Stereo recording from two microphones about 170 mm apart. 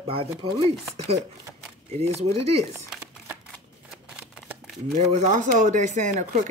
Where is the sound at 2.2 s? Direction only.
35° right (ahead or behind).